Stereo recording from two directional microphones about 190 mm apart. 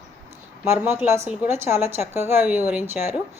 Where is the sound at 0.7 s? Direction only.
10° right (ahead or behind).